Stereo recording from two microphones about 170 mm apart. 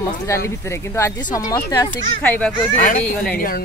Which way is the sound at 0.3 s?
15° left (ahead or behind).